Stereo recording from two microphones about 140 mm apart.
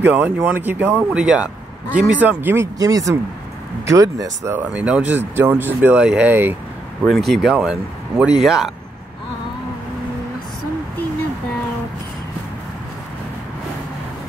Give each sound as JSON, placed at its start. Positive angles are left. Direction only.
{"t": 0.0, "sound": "speech", "side_deg": -15}
{"t": 4.6, "sound": "speech", "side_deg": -10}
{"t": 7.1, "sound": "speech", "side_deg": 0}